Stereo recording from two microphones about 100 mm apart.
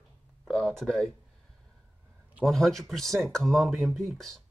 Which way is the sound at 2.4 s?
5° left (ahead or behind).